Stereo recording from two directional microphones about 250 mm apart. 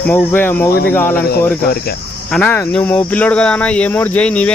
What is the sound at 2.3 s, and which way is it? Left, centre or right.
Speech, centre.